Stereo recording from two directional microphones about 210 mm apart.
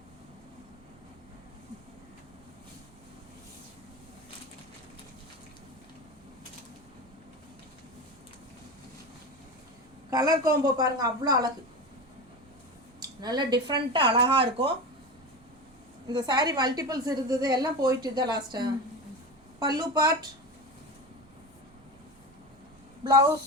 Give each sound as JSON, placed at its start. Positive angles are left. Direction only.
{"t": 10.1, "sound": "a woman's voice", "side_deg": -15}
{"t": 13.0, "sound": "a woman's voice", "side_deg": -20}
{"t": 16.0, "sound": "a woman's voice", "side_deg": -20}